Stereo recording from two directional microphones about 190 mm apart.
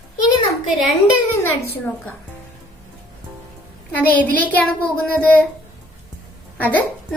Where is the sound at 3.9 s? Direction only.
10° left (ahead or behind).